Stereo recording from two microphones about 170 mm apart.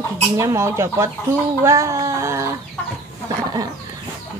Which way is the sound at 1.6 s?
15° right (ahead or behind).